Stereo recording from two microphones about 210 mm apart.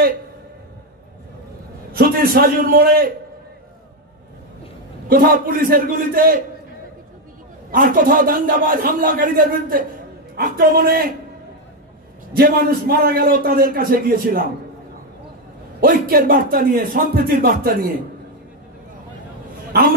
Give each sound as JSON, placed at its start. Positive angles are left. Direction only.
{"t": 1.9, "sound": "a man's voice", "side_deg": -45}
{"t": 5.1, "sound": "a man's voice", "side_deg": -40}
{"t": 7.7, "sound": "a man's voice", "side_deg": -40}
{"t": 12.4, "sound": "a man's voice", "side_deg": -45}
{"t": 15.8, "sound": "a man's voice", "side_deg": -45}